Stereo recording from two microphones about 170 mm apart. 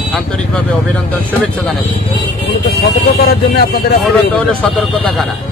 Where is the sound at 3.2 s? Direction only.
65° left (ahead or behind).